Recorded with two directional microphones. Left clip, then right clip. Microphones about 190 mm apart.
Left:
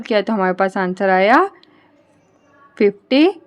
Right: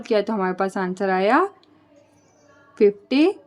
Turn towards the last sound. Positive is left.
turn(degrees=30)  # may be behind; listen again after turning